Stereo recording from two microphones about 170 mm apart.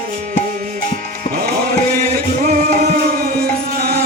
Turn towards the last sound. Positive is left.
turn(degrees=-50)  # may be behind; listen again after turning